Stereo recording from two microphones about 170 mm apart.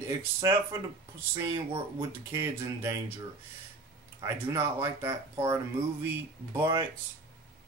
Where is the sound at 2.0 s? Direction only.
15° right (ahead or behind).